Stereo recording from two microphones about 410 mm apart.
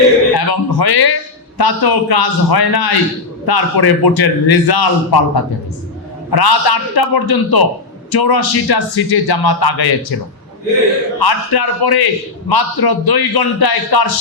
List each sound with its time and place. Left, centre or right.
0.3 s a sound: left
1.5 s a man's voice: left
11.2 s a man's voice: left